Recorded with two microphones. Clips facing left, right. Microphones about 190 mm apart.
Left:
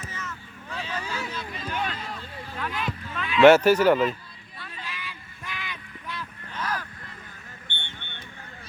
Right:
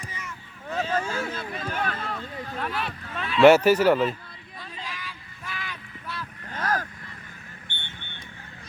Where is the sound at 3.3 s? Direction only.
10° right (ahead or behind).